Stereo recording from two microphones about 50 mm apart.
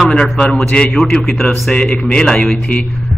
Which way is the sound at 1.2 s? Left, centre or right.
Centre.